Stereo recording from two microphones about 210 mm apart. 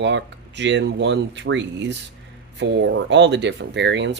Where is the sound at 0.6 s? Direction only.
55° right (ahead or behind).